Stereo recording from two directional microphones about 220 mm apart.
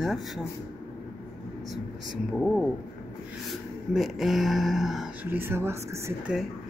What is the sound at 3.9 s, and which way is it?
Speech, centre (ahead or behind).